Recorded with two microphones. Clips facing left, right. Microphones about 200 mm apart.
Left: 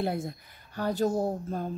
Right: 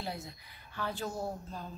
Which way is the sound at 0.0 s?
55° left (ahead or behind).